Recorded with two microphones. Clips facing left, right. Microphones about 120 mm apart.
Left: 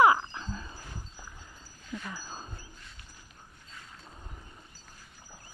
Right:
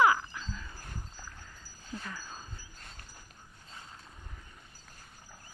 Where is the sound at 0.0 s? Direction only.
25° left (ahead or behind).